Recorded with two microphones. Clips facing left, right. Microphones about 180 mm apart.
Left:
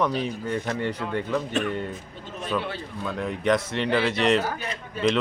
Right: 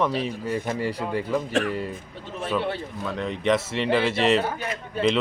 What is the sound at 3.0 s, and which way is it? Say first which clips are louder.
Speech: left 1 dB; centre (ahead or behind).